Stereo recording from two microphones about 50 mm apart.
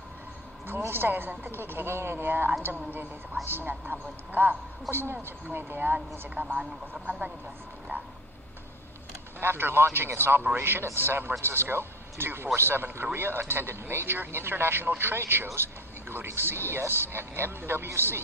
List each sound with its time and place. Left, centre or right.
0.8 s a man's voice: right
4.9 s a man's voice: right
7.1 s speech: right
7.9 s a sound: right
9.4 s a man's voice: right